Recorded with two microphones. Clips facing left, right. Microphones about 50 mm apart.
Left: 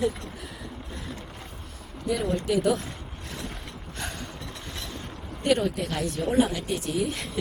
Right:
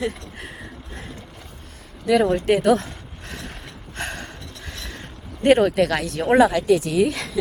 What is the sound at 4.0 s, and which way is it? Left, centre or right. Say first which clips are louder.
Gasp: right 6 dB; right.